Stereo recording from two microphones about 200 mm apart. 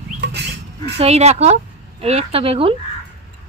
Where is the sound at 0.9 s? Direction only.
30° right (ahead or behind).